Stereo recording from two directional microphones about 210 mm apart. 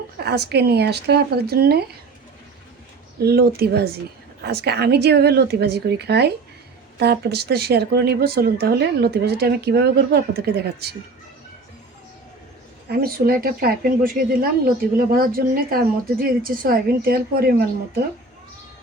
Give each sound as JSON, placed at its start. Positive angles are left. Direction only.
{"t": 0.2, "sound": "speech", "side_deg": -50}
{"t": 3.2, "sound": "speech", "side_deg": -50}
{"t": 12.9, "sound": "speech", "side_deg": -45}